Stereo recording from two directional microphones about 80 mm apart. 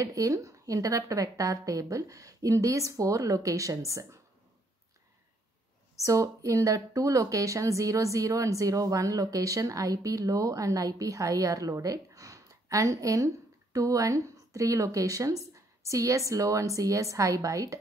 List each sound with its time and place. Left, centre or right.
0.0 s speech: right
6.0 s speech: right